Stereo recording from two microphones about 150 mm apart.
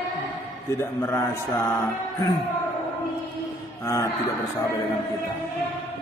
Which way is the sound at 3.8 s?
20° left (ahead or behind).